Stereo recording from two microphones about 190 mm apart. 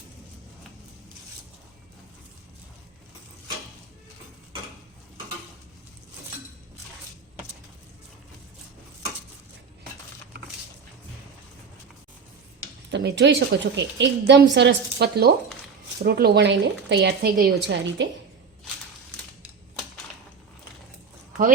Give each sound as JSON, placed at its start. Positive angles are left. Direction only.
{"t": 12.9, "sound": "a woman's voice", "side_deg": -70}
{"t": 17.7, "sound": "a woman's voice", "side_deg": -70}